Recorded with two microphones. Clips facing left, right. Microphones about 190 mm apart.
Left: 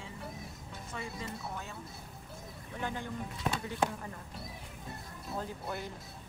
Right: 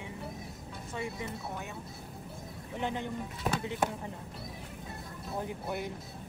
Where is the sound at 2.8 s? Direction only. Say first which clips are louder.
Right 4 dB; 20° right (ahead or behind).